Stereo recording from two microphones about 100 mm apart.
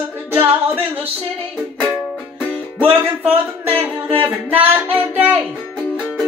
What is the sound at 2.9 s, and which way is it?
Speech, 20° right (ahead or behind).